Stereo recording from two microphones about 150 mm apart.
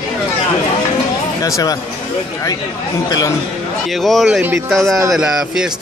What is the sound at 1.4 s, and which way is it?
Speech, 25° left (ahead or behind).